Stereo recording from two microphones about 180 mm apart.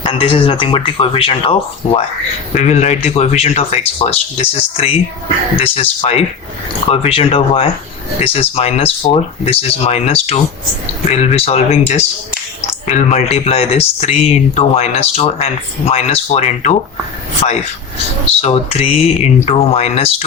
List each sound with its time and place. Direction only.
0.0 s speech: 30° left (ahead or behind)
12.9 s speech: 35° left (ahead or behind)
18.3 s speech: 35° left (ahead or behind)